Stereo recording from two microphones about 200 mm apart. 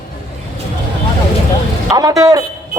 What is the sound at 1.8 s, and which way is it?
Speech, 20° right (ahead or behind).